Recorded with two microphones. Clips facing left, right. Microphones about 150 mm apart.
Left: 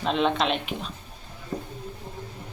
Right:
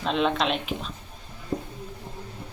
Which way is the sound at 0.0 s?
Centre (ahead or behind).